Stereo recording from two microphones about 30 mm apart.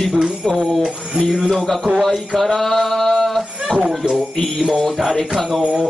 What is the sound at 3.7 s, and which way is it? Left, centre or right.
Speech, right.